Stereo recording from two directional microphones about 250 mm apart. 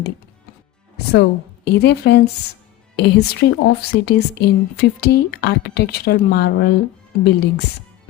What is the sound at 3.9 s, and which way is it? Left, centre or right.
A woman's voice, left.